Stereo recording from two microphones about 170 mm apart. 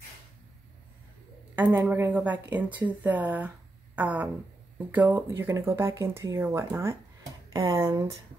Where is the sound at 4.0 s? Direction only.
10° right (ahead or behind).